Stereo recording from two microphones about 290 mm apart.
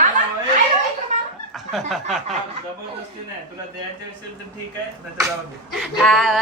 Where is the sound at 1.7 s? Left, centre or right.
Centre.